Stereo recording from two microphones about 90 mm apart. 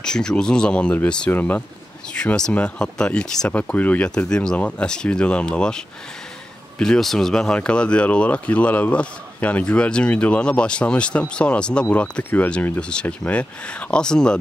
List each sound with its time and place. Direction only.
0.0 s speech: 10° left (ahead or behind)